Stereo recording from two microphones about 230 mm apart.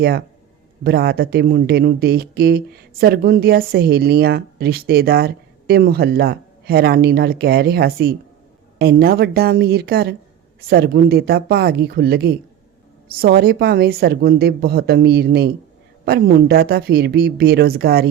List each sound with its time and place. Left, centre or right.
0.9 s speech: right